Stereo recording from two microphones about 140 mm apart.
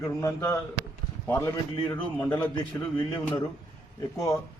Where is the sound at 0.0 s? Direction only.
25° left (ahead or behind).